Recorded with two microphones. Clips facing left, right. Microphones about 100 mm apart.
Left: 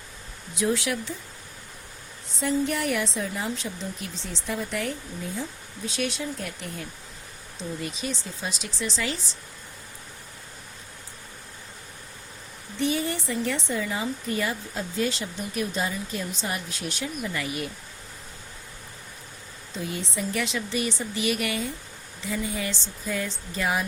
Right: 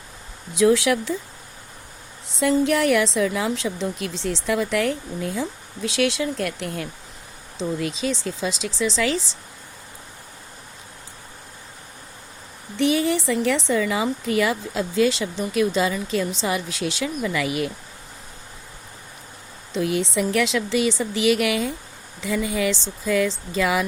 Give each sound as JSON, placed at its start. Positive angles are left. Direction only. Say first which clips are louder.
{"t": 0.5, "sound": "a woman's voice", "louder": "right 9 dB", "side_deg": -90}
{"t": 2.4, "sound": "a woman's voice", "louder": "right 7 dB", "side_deg": -90}
{"t": 12.8, "sound": "a woman's voice", "louder": "right 7 dB", "side_deg": -90}
{"t": 19.7, "sound": "a woman's voice", "louder": "right 10 dB", "side_deg": -90}